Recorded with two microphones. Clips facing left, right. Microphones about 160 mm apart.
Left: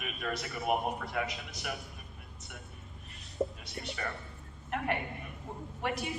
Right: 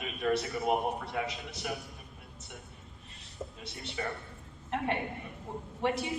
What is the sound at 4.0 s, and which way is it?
Speech, 20° right (ahead or behind).